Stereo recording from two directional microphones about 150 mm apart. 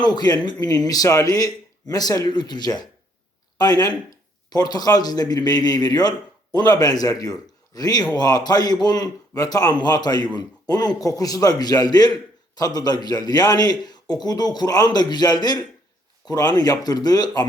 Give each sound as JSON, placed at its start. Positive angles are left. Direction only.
{"t": 0.0, "sound": "a man's voice", "side_deg": 30}